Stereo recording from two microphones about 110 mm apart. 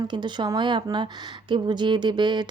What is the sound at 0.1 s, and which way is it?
A woman's voice, 45° right (ahead or behind).